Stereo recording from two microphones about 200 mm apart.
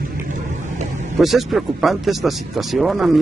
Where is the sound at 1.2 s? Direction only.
Centre (ahead or behind).